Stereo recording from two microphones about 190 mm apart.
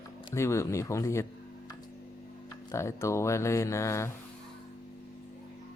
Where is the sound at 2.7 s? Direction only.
15° left (ahead or behind).